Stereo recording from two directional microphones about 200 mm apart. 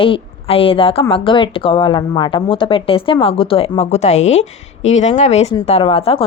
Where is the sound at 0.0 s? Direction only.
25° left (ahead or behind).